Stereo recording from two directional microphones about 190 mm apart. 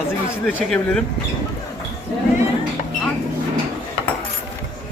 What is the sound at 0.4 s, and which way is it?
Speech, 5° left (ahead or behind).